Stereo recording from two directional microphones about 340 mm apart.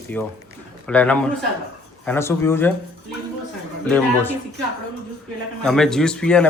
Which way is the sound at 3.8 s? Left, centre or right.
Centre.